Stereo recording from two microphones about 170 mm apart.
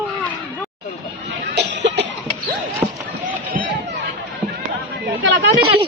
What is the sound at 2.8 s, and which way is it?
Rowboat, 15° right (ahead or behind).